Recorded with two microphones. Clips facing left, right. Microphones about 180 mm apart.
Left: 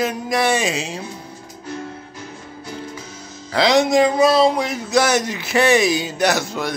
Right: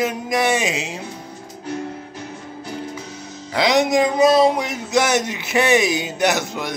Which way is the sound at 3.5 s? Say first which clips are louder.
Left 2 dB; 15° right (ahead or behind).